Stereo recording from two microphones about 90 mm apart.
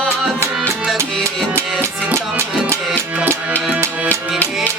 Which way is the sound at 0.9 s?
30° right (ahead or behind).